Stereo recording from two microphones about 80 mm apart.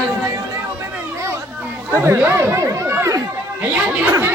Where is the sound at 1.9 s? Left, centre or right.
Right.